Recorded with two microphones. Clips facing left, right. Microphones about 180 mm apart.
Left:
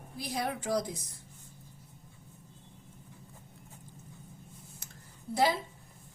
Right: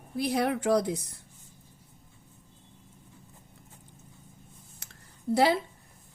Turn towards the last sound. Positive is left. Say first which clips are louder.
# right 5 dB
turn(degrees=-70)  # may be behind; listen again after turning